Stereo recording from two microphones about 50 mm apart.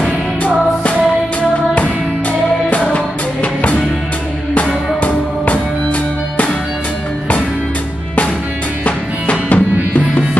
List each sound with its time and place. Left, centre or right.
2.7 s music: left
5.0 s music: left
8.8 s music: left